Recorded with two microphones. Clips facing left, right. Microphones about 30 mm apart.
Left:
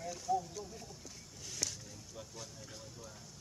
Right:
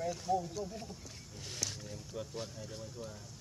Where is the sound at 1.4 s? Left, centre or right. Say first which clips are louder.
Right 1 dB; right.